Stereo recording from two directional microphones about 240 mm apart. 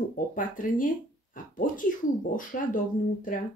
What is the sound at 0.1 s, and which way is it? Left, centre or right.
Speech, left.